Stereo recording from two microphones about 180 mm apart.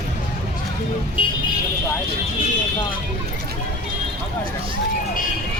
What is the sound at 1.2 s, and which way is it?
Vehicle, 30° left (ahead or behind).